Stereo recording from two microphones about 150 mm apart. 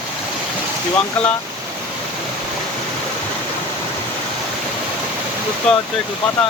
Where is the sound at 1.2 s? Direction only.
5° left (ahead or behind).